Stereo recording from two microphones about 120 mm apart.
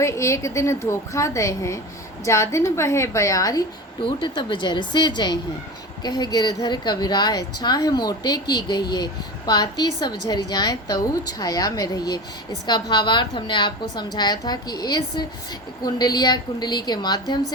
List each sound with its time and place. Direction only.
0.0 s a woman's voice: 25° left (ahead or behind)